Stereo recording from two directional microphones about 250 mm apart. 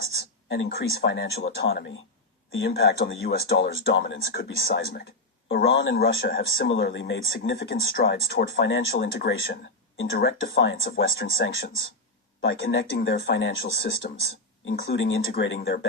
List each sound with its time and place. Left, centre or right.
0.4 s a man's voice: left